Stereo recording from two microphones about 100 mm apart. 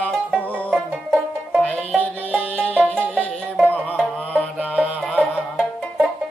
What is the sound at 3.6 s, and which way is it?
Music, 15° left (ahead or behind).